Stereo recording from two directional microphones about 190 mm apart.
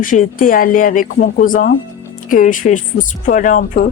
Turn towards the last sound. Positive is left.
turn(degrees=45)  # may be behind; listen again after turning